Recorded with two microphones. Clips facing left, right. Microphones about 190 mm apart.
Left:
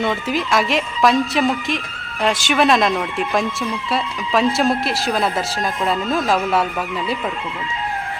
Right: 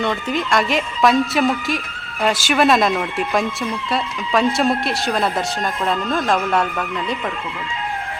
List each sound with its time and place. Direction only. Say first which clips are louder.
0.0 s speech: left 1 dB; centre (ahead or behind)